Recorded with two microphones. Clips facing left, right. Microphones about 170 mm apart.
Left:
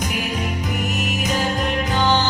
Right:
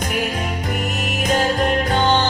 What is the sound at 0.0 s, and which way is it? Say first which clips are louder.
Music: right 2 dB; 55° right (ahead or behind).